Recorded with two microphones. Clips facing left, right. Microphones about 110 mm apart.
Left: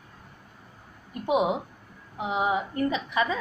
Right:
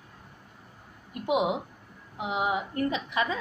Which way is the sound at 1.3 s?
35° left (ahead or behind).